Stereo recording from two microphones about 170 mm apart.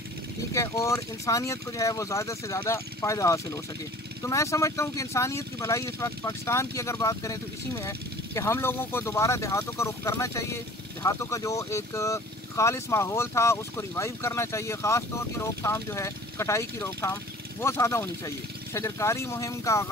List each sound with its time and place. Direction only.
0.5 s speech: 15° left (ahead or behind)